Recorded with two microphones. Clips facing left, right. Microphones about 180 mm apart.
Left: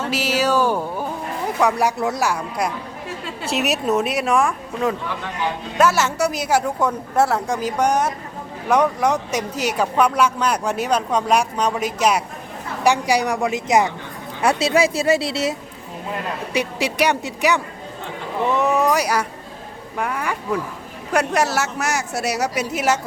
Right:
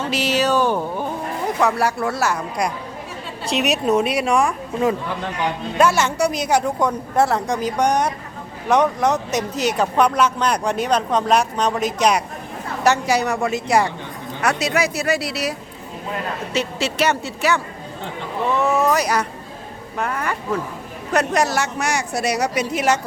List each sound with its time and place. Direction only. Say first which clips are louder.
0.1 s speech: right 1 dB; 5° left (ahead or behind)
1.6 s speech: left 1 dB; 20° left (ahead or behind)
14.4 s speech: left 3 dB; 30° left (ahead or behind)
16.5 s speech: left 1 dB; 15° left (ahead or behind)